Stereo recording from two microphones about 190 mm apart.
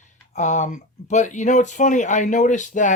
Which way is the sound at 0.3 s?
40° left (ahead or behind).